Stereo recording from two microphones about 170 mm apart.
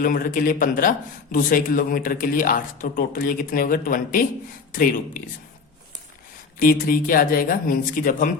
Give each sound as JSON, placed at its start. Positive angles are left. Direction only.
{"t": 0.0, "sound": "speech", "side_deg": 55}
{"t": 6.6, "sound": "speech", "side_deg": 55}